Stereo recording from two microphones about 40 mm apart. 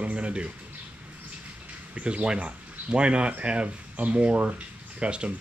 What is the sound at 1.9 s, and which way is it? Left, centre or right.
Speech, right.